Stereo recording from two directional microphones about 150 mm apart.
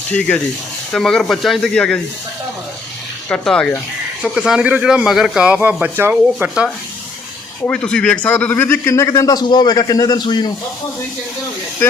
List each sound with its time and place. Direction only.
0.1 s speech: 10° left (ahead or behind)
3.2 s speech: 5° left (ahead or behind)
4.4 s a man's voice: 5° right (ahead or behind)
7.6 s speech: 5° left (ahead or behind); by 10.5 s 30° left (ahead or behind)